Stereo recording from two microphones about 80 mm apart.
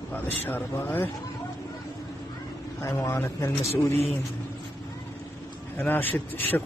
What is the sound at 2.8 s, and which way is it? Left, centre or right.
Speech, left.